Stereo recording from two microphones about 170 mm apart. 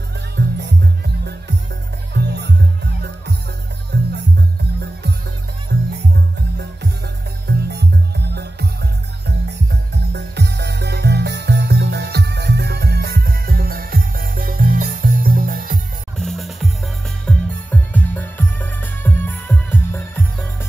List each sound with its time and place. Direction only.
0.4 s music: 75° right (ahead or behind)
5.7 s music: 75° right (ahead or behind); by 15.8 s 55° right (ahead or behind)
16.2 s music: centre (ahead or behind)